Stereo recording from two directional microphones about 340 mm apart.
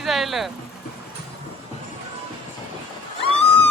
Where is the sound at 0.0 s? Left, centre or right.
Centre.